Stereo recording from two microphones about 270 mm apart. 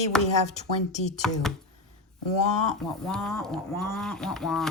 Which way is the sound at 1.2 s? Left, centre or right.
Centre.